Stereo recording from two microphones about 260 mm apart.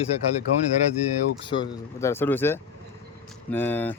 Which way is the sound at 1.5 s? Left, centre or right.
Centre.